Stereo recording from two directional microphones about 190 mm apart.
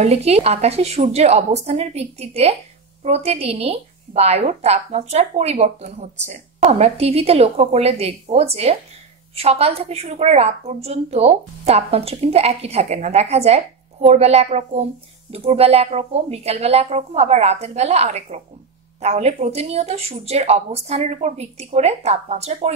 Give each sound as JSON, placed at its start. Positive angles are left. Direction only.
{"t": 0.0, "sound": "a woman's voice", "side_deg": -35}